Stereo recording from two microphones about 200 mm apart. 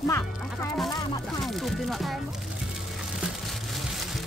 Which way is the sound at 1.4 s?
Centre (ahead or behind).